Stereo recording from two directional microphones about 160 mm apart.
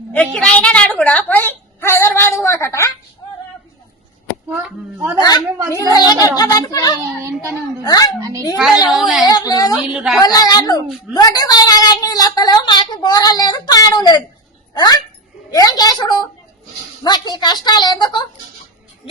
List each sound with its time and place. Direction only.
0.1 s a woman's voice: 5° left (ahead or behind)
4.4 s speech: 10° right (ahead or behind)
5.1 s a woman's voice: 25° left (ahead or behind)
7.2 s speech: 20° right (ahead or behind)
7.9 s a woman's voice: 20° left (ahead or behind)
8.2 s a child's voice: 20° right (ahead or behind)
8.9 s a woman's voice: centre (ahead or behind)
9.2 s a woman's voice: 25° left (ahead or behind)
9.7 s a woman's voice: 5° right (ahead or behind)
10.2 s a woman's voice: 25° left (ahead or behind)